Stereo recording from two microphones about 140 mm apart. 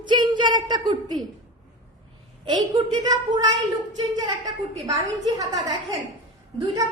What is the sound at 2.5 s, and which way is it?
Speech, 35° right (ahead or behind).